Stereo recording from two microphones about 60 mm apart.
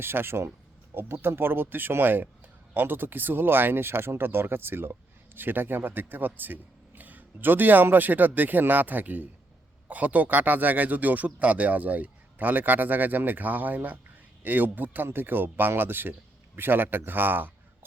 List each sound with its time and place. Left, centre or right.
0.0 s speech: right